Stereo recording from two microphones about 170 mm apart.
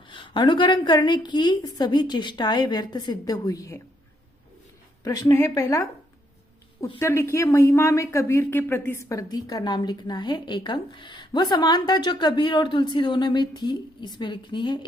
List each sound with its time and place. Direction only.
0.1 s speech: 30° left (ahead or behind)
5.0 s speech: 20° left (ahead or behind)
7.0 s speech: 15° left (ahead or behind)